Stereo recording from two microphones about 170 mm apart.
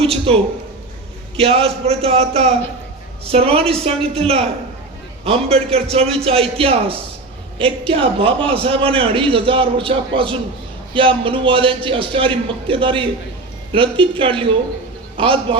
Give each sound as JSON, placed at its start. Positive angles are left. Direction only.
{"t": 0.0, "sound": "a man's voice", "side_deg": -35}
{"t": 1.4, "sound": "a man's voice", "side_deg": -35}
{"t": 5.2, "sound": "a man's voice", "side_deg": -35}